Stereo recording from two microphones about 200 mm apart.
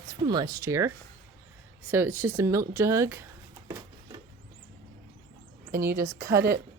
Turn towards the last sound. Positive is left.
turn(degrees=-15)  # may be behind; listen again after turning